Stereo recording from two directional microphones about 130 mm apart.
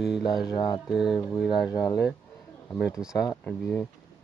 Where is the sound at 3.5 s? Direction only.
10° left (ahead or behind).